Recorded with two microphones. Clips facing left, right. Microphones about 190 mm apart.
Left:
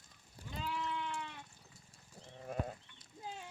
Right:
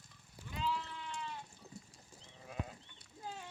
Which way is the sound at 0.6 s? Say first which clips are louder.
Left 1 dB; 65° left (ahead or behind).